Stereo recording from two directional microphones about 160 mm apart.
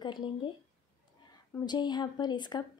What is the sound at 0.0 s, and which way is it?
Speech, 30° left (ahead or behind).